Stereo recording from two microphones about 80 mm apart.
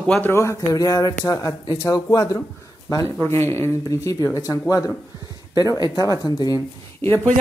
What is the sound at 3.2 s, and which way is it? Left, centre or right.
Speech, left.